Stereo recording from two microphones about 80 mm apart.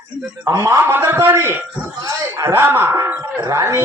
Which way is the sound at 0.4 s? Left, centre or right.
Right.